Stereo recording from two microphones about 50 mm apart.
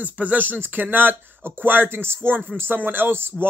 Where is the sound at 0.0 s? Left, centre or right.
Right.